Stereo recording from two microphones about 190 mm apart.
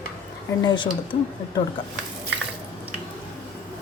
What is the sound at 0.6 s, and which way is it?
Speech, 25° left (ahead or behind).